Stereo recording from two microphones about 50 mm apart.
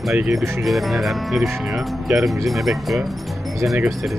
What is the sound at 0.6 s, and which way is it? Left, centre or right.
A woman's voice, centre.